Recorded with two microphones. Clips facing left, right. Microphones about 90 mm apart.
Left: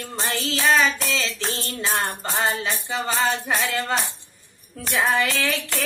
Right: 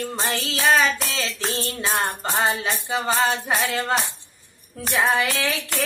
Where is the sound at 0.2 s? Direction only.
10° right (ahead or behind).